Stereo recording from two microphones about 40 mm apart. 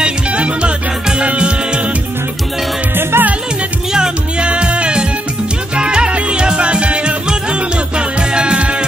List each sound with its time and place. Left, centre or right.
0.0 s music: right
3.0 s music: right
3.9 s music: right